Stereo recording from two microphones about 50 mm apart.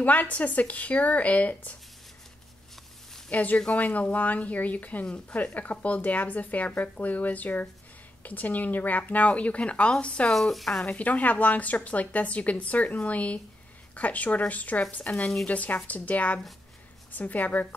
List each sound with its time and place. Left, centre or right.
0.0 s a woman's voice: left
3.3 s a woman's voice: left
10.5 s speech: centre
10.9 s a woman's voice: left